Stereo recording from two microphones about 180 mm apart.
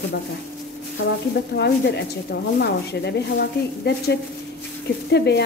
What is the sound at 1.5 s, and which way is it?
Speech, 70° left (ahead or behind).